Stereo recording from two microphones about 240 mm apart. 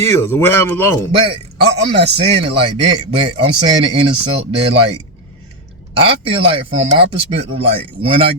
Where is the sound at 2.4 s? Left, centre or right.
Right.